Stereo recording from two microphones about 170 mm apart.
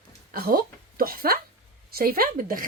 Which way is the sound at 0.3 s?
60° right (ahead or behind).